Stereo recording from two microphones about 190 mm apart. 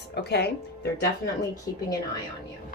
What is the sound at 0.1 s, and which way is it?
Speech, 60° left (ahead or behind).